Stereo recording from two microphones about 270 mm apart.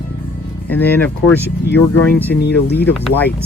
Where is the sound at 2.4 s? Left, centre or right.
Left.